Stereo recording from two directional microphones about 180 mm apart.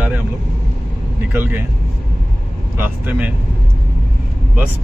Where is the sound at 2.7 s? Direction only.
10° right (ahead or behind).